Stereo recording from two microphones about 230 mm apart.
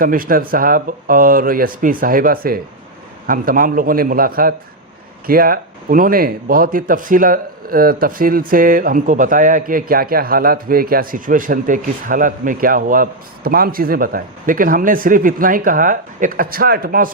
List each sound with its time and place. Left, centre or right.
0.0 s a man's voice: right